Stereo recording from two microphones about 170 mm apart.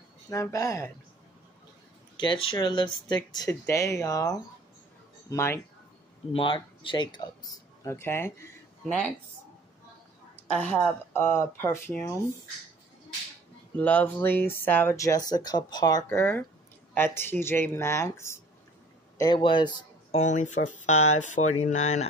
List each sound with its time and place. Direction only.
0.3 s speech: 20° left (ahead or behind)
2.1 s speech: 25° left (ahead or behind)
6.3 s speech: 30° left (ahead or behind)
7.8 s speech: 15° left (ahead or behind)
10.3 s speech: 10° left (ahead or behind)
13.7 s speech: 10° left (ahead or behind)
19.1 s speech: 25° left (ahead or behind)
20.2 s speech: 45° left (ahead or behind)